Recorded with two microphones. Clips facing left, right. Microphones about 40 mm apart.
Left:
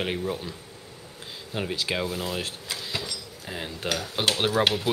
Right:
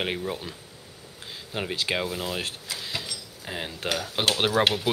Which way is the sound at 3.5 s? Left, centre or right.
Centre.